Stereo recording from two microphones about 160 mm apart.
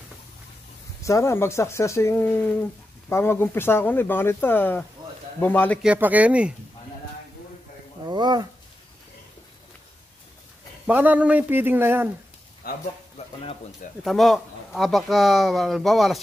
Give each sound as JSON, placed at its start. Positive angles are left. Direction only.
{"t": 1.0, "sound": "speech", "side_deg": 20}
{"t": 5.8, "sound": "speech", "side_deg": -10}
{"t": 8.1, "sound": "speech", "side_deg": -25}
{"t": 10.9, "sound": "speech", "side_deg": -10}
{"t": 12.6, "sound": "speech", "side_deg": 70}
{"t": 14.0, "sound": "speech", "side_deg": 0}